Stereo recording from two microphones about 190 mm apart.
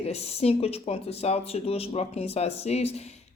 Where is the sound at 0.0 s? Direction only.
35° left (ahead or behind).